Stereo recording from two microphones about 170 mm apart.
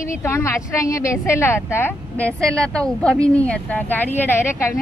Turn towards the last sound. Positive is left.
turn(degrees=15)  # may be behind; listen again after turning